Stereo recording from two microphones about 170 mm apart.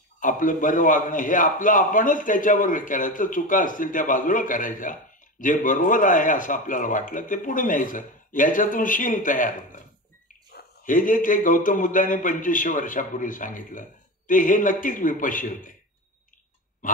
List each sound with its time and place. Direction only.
0.2 s speech: 50° left (ahead or behind)